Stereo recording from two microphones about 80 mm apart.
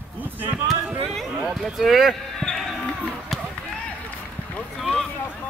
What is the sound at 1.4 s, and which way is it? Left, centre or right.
Speech, centre.